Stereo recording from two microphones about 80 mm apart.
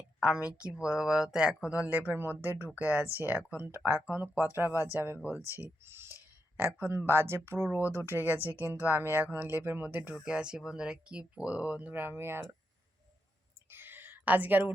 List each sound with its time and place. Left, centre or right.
0.2 s speech: centre
10.2 s speech: centre; by 12.5 s right
13.7 s a sound: right